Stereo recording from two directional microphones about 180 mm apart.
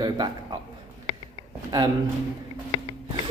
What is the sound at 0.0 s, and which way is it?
Speech, 25° right (ahead or behind).